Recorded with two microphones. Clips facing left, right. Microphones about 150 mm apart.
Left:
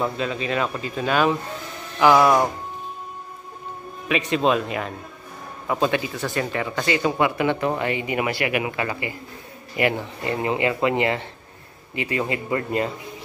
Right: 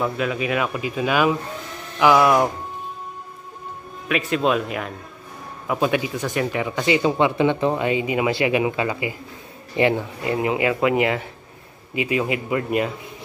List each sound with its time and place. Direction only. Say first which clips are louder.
0.0 s a man's voice: right 2 dB; 10° right (ahead or behind)
4.1 s a man's voice: even; centre (ahead or behind); by 9.9 s 25° right (ahead or behind)
10.2 s a man's voice: right 1 dB; 10° right (ahead or behind)